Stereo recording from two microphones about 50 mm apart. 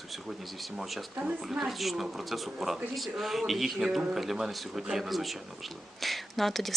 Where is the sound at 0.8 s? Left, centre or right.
Centre.